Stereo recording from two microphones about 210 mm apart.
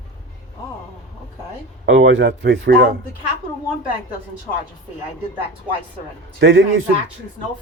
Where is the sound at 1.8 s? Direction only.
65° right (ahead or behind).